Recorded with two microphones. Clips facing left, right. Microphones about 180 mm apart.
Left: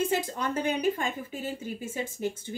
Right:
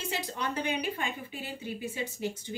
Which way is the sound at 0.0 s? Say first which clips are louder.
Left 6 dB; 45° left (ahead or behind).